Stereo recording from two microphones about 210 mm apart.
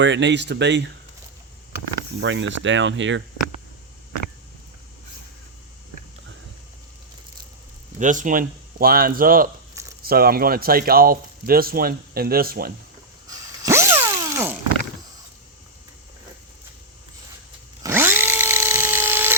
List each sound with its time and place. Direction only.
0.0 s speech: 60° right (ahead or behind)
2.2 s speech: 60° right (ahead or behind)
7.9 s speech: 35° right (ahead or behind)
13.2 s zipper: 15° right (ahead or behind)
17.8 s tools: 10° right (ahead or behind)